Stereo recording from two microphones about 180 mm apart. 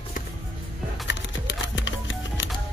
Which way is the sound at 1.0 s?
80° left.